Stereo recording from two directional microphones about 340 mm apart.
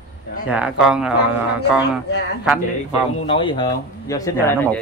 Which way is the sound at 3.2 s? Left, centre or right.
Centre.